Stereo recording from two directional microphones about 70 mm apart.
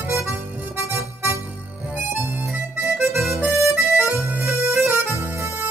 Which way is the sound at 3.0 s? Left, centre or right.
Right.